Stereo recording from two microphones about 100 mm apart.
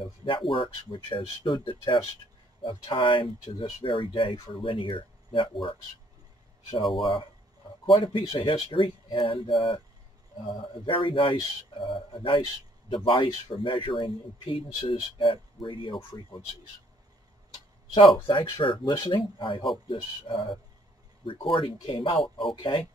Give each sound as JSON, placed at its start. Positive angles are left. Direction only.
{"t": 0.0, "sound": "speech", "side_deg": 60}
{"t": 7.0, "sound": "speech", "side_deg": 55}
{"t": 17.9, "sound": "speech", "side_deg": 55}